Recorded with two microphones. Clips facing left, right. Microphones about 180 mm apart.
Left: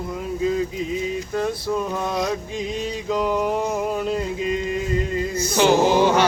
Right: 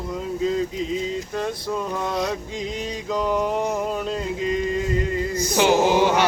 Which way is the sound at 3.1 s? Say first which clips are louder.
Left 1 dB; 10° left (ahead or behind).